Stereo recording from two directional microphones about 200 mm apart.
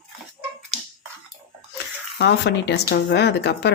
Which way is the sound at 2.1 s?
55° left (ahead or behind).